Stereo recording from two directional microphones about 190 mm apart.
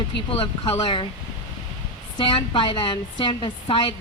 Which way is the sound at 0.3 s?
30° left (ahead or behind).